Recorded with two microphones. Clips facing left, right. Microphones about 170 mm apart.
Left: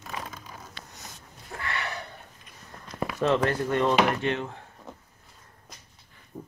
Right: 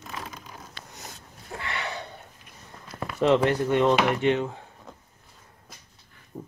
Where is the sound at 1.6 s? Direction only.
20° right (ahead or behind).